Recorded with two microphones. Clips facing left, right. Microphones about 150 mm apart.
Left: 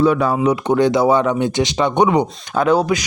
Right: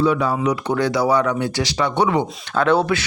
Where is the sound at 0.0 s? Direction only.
50° left (ahead or behind).